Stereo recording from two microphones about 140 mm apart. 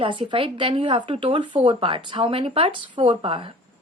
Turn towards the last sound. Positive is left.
turn(degrees=-40)  # may be behind; listen again after turning